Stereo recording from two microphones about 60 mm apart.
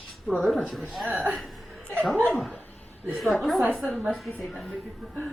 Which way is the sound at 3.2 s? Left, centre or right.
Centre.